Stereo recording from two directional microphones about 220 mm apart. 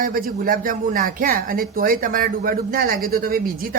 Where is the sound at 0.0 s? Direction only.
40° right (ahead or behind).